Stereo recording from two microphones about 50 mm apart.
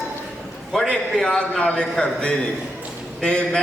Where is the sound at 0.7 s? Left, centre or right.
Centre.